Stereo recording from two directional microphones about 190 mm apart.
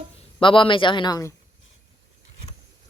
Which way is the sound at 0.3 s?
25° left (ahead or behind).